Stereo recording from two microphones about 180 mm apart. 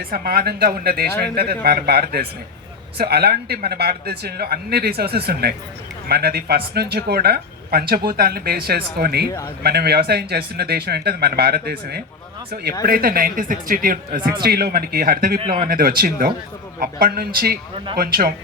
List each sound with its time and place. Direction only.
0.0 s a man's voice: 55° right (ahead or behind)
14.2 s speech: 25° right (ahead or behind)
14.4 s speech: 60° right (ahead or behind)